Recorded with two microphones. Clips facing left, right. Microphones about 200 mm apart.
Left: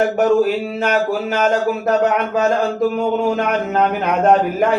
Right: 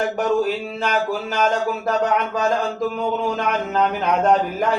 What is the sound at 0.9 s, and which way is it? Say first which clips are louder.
Speech: left 4 dB; 50° left (ahead or behind).